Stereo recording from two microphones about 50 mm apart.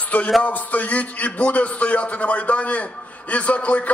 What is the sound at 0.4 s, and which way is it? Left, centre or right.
A man's voice, left.